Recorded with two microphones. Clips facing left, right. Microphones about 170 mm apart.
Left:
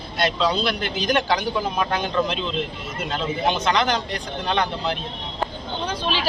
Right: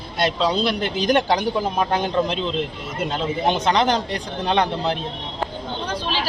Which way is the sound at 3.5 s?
25° right (ahead or behind).